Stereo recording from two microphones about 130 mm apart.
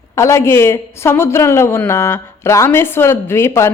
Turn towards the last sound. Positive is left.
turn(degrees=20)  # may be behind; listen again after turning